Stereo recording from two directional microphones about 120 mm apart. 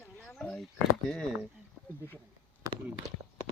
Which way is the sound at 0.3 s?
5° left (ahead or behind).